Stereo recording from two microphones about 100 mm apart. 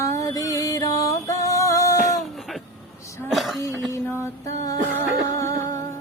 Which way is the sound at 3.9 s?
30° left (ahead or behind).